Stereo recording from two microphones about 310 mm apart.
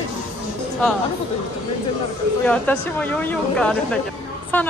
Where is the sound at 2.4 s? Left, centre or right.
Centre.